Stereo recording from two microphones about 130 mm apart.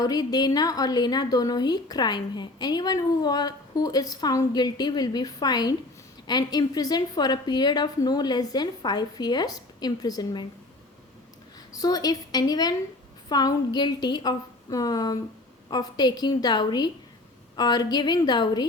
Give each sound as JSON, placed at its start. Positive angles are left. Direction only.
{"t": 0.0, "sound": "a woman's voice", "side_deg": 30}
{"t": 11.7, "sound": "a woman's voice", "side_deg": 30}